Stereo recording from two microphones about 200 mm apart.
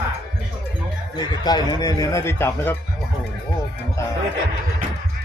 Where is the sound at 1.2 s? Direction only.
20° left (ahead or behind).